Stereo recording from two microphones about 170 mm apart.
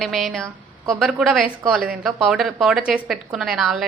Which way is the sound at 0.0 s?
Centre (ahead or behind).